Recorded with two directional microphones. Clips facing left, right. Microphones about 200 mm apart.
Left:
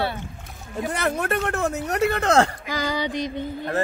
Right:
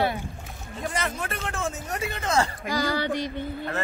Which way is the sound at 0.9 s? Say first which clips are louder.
Left 6 dB; 60° left (ahead or behind).